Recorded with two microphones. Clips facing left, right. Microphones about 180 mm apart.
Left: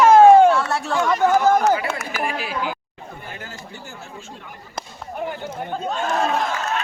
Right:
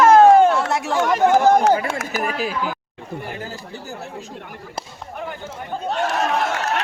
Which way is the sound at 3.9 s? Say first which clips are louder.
Right 5 dB; 65° right (ahead or behind).